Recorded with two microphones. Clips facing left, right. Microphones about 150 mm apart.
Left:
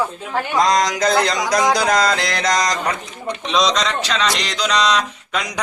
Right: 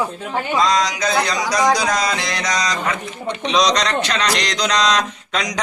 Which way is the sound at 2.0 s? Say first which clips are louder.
Left 3 dB; 55° left (ahead or behind).